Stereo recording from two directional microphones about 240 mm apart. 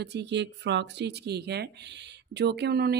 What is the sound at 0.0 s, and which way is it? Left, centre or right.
Speech, right.